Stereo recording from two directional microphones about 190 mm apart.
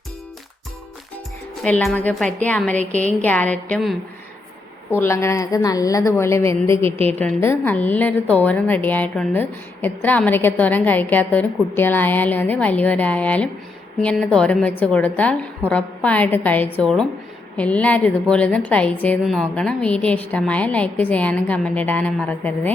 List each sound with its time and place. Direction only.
1.6 s a woman's voice: 5° left (ahead or behind)